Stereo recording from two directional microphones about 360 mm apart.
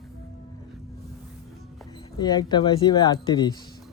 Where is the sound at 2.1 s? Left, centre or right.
Centre.